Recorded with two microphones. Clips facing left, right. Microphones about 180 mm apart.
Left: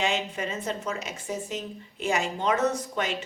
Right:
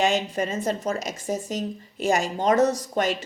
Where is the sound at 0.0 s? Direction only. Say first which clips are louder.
Right 5 dB; 45° right (ahead or behind).